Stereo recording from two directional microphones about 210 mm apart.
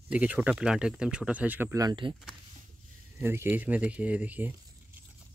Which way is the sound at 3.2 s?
10° right (ahead or behind).